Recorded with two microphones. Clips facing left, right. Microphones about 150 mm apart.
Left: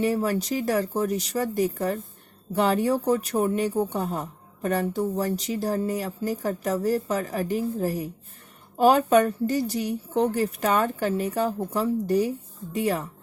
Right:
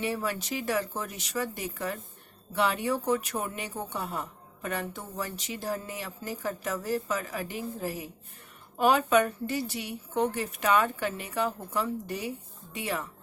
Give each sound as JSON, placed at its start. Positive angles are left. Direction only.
{"t": 0.0, "sound": "speech", "side_deg": 40}